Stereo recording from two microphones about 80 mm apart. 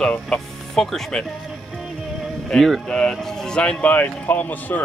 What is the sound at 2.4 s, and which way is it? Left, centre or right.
Speech, centre.